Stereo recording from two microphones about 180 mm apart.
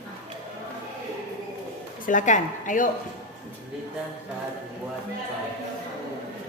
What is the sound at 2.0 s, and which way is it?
Speech, 45° left (ahead or behind).